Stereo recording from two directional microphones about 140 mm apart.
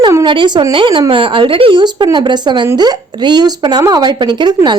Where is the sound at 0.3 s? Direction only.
35° right (ahead or behind).